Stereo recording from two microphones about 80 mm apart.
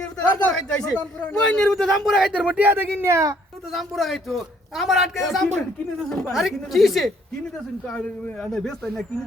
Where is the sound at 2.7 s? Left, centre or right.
Right.